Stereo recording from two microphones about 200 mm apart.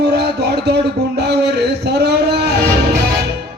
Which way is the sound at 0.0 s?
55° right (ahead or behind).